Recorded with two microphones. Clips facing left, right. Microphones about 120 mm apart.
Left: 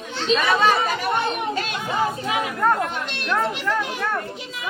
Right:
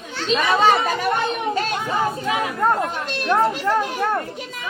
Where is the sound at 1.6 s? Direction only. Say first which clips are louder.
Right 4 dB; 45° right (ahead or behind).